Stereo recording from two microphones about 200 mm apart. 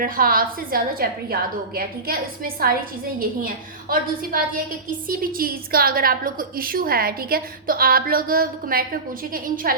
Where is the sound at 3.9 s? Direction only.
45° right (ahead or behind).